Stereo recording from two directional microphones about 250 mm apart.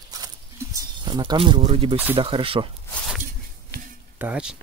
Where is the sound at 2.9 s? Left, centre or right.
Centre.